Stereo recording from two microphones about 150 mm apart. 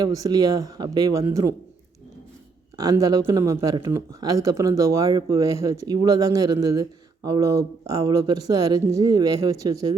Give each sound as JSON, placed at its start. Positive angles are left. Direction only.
{"t": 0.0, "sound": "speech", "side_deg": -25}
{"t": 2.7, "sound": "speech", "side_deg": -25}